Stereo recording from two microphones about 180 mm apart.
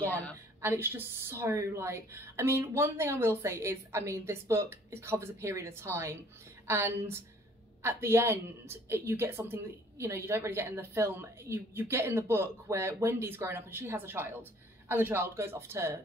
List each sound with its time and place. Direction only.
0.6 s a woman's voice: 15° right (ahead or behind)